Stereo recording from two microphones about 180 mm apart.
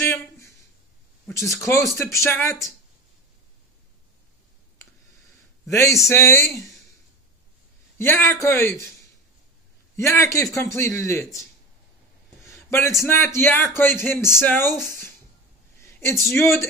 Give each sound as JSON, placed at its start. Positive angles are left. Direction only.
{"t": 1.3, "sound": "a man's voice", "side_deg": 15}
{"t": 5.7, "sound": "a man's voice", "side_deg": 15}
{"t": 8.0, "sound": "a man's voice", "side_deg": 15}
{"t": 9.9, "sound": "a man's voice", "side_deg": 15}
{"t": 12.4, "sound": "a man's voice", "side_deg": 15}